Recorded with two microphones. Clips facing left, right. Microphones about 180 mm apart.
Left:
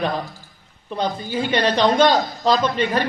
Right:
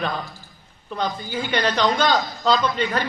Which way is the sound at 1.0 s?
30° left (ahead or behind).